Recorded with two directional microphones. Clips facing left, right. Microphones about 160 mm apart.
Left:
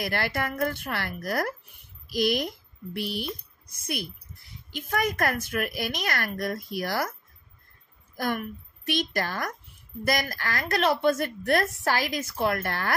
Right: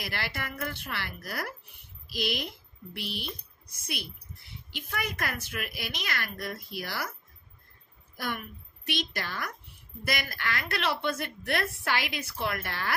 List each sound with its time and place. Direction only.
0.0 s a woman's voice: 50° left (ahead or behind)
8.2 s a woman's voice: 45° left (ahead or behind)